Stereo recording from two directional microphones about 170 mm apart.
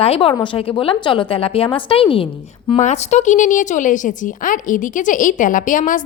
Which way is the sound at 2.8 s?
45° left (ahead or behind).